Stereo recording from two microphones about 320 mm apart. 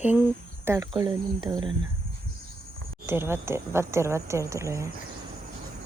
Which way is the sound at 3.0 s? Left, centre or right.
Centre.